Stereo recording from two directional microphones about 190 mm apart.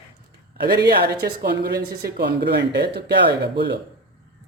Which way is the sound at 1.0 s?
55° right (ahead or behind).